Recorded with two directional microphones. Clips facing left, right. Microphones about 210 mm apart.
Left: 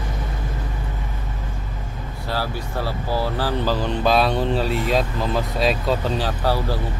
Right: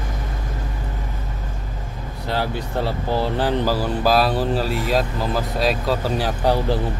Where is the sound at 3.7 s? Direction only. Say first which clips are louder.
Right 1 dB; 5° right (ahead or behind).